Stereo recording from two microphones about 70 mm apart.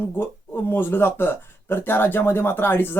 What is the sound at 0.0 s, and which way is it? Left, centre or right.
Speech, left.